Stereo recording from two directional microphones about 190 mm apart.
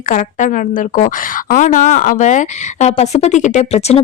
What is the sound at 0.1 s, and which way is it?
A woman's voice, 40° left (ahead or behind).